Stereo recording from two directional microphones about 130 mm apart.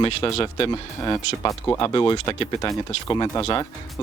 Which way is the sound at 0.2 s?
30° left (ahead or behind).